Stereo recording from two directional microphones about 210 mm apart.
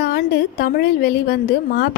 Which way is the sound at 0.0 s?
50° left (ahead or behind).